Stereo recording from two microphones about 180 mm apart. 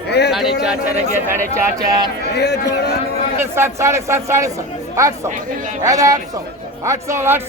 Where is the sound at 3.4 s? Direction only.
15° right (ahead or behind).